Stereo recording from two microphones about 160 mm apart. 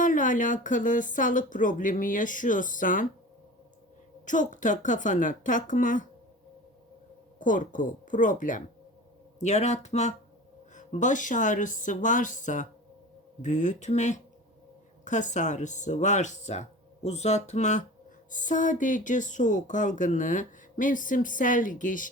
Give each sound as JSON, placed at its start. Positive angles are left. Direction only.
{"t": 0.0, "sound": "speech", "side_deg": 55}
{"t": 4.3, "sound": "speech", "side_deg": 50}
{"t": 7.3, "sound": "speech", "side_deg": 55}